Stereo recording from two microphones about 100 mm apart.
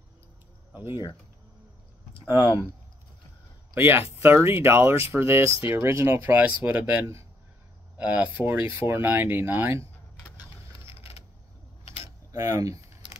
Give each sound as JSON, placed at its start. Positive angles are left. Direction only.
{"t": 0.7, "sound": "speech", "side_deg": -25}
{"t": 2.1, "sound": "speech", "side_deg": 50}
{"t": 3.7, "sound": "speech", "side_deg": -20}
{"t": 11.0, "sound": "a sound", "side_deg": 75}
{"t": 11.8, "sound": "mechanisms", "side_deg": 70}
{"t": 12.3, "sound": "keys jangling", "side_deg": -35}